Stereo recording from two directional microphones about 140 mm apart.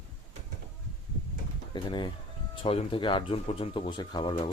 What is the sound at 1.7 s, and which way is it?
Speech, 35° left (ahead or behind).